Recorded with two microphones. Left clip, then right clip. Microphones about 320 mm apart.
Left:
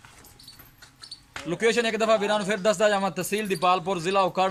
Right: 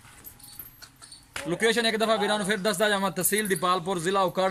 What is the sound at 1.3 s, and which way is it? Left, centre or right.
A man's voice, centre.